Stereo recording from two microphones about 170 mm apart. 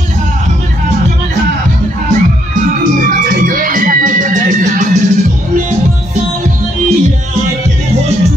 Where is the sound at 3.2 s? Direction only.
55° right (ahead or behind).